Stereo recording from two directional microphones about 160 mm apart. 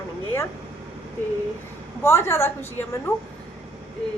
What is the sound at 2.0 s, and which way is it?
A woman's voice, 15° left (ahead or behind).